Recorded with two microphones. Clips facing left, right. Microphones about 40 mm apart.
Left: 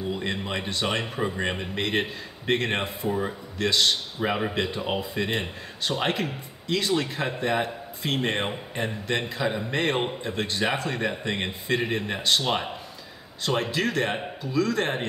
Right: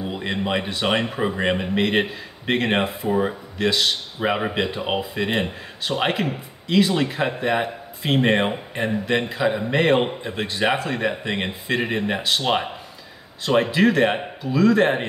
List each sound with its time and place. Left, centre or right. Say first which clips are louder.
0.1 s a man's voice: right 7 dB; centre
3.1 s speech: right 5 dB; right
3.5 s a man's voice: right 1 dB; centre
4.2 s a man's voice: right 6 dB; centre